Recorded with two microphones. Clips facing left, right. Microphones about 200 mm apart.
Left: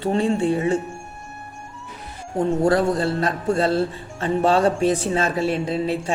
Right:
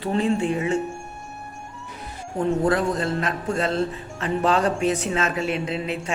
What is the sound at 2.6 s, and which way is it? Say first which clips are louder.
Speech: left 5 dB; 30° left (ahead or behind).